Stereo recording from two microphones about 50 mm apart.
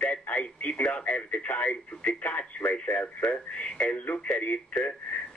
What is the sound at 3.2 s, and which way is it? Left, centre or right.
Radio, left.